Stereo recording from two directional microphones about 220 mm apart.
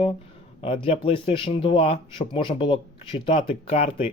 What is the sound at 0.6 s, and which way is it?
Speech, 25° left (ahead or behind).